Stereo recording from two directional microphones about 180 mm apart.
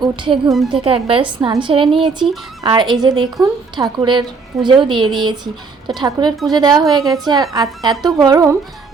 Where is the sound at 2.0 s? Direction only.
Centre (ahead or behind).